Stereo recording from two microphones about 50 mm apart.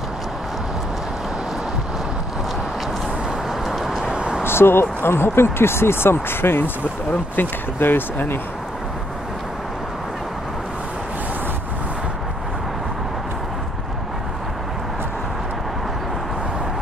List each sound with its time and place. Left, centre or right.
3.4 s vehicle: centre
4.4 s speech: left